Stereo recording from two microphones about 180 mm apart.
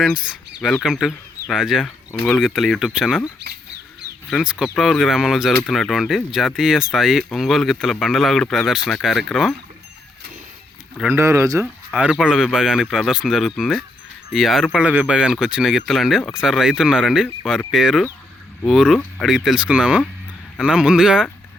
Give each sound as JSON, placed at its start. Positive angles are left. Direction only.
{"t": 0.0, "sound": "speech", "side_deg": -5}
{"t": 4.3, "sound": "speech", "side_deg": -5}
{"t": 10.9, "sound": "speech", "side_deg": -5}
{"t": 11.2, "sound": "speech", "side_deg": -15}
{"t": 11.6, "sound": "speech", "side_deg": -5}